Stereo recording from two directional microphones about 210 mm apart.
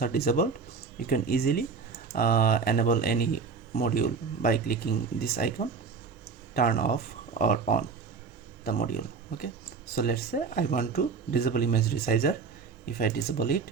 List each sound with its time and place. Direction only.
0.0 s speech: 45° left (ahead or behind)